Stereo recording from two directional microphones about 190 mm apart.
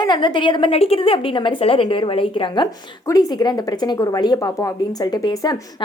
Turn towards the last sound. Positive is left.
turn(degrees=20)  # may be behind; listen again after turning